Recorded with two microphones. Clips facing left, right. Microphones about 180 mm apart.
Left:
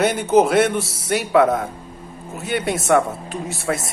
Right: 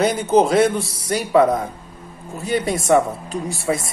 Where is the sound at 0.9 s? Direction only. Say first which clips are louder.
Left 1 dB; 80° left.